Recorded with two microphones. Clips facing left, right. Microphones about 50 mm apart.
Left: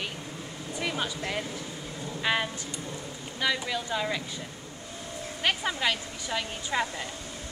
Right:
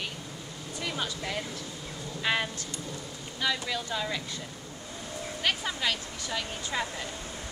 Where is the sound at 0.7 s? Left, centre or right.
Centre.